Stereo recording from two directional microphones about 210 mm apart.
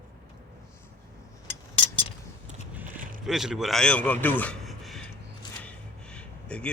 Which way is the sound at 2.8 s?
40° right (ahead or behind).